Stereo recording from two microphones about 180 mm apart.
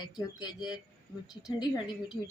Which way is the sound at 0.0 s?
25° left (ahead or behind).